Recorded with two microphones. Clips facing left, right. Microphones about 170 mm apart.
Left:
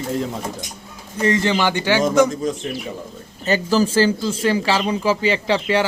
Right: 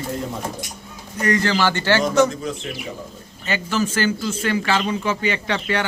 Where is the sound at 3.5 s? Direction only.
35° left (ahead or behind).